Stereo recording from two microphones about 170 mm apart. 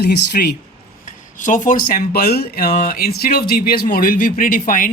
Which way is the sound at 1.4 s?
50° left (ahead or behind).